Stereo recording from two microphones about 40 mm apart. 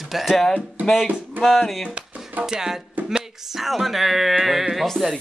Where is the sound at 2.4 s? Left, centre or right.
Centre.